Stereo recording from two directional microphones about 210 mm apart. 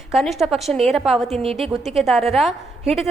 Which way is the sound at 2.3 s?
Centre (ahead or behind).